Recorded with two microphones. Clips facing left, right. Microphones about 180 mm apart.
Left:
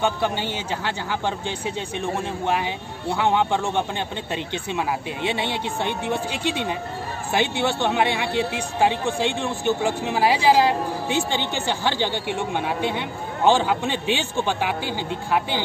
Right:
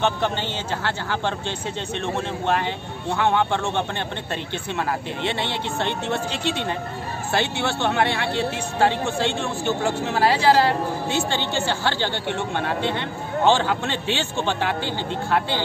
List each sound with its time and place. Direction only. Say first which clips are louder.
0.0 s speech: even; 10° left (ahead or behind)